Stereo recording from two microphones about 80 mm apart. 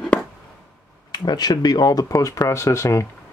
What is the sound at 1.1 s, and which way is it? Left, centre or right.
Speech, left.